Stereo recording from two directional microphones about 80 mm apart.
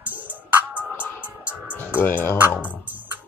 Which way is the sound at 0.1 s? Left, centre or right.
Right.